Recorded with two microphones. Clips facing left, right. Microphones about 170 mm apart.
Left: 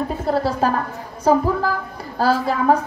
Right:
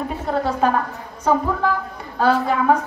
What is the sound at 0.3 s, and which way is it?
Speech, 35° left (ahead or behind).